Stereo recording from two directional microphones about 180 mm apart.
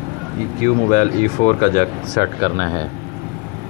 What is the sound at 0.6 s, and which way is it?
Speech, 40° left (ahead or behind).